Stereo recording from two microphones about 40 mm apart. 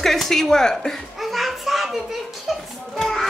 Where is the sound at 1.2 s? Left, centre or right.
Centre.